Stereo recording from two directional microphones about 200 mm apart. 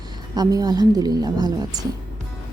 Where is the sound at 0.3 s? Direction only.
20° right (ahead or behind).